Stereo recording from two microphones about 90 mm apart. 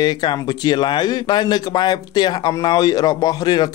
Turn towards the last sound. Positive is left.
turn(degrees=45)  # may be behind; listen again after turning